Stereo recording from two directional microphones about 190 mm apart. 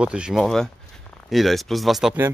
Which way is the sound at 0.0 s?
5° right (ahead or behind).